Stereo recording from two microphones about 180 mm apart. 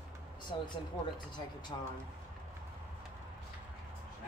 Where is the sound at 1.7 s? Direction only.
25° left (ahead or behind).